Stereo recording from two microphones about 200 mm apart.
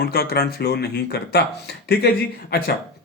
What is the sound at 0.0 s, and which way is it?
Speech, 50° left (ahead or behind).